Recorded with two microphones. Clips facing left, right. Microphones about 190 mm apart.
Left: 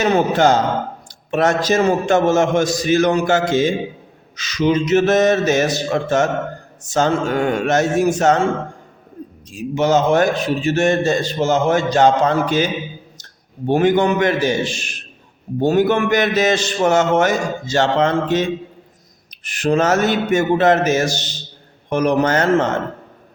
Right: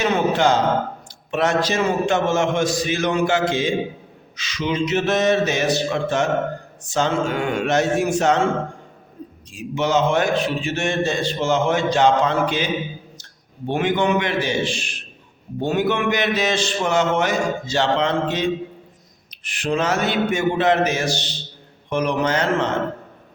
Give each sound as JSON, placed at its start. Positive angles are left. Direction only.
{"t": 0.0, "sound": "a man's voice", "side_deg": 45}
{"t": 9.5, "sound": "a man's voice", "side_deg": 40}
{"t": 13.7, "sound": "a man's voice", "side_deg": 40}
{"t": 19.5, "sound": "a man's voice", "side_deg": 45}